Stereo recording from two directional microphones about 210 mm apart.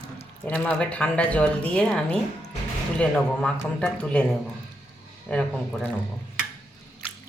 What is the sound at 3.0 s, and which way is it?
Speech, 5° left (ahead or behind).